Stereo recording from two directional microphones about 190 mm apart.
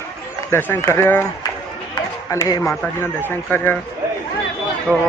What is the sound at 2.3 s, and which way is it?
Speech, 20° left (ahead or behind).